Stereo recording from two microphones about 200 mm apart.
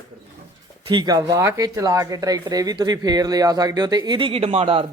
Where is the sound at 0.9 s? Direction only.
20° right (ahead or behind).